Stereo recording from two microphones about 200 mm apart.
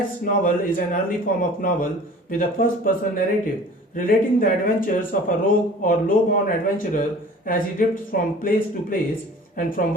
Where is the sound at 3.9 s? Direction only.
45° left (ahead or behind).